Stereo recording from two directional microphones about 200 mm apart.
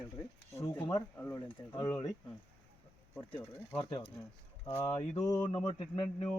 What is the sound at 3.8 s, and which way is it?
Speech, 20° left (ahead or behind).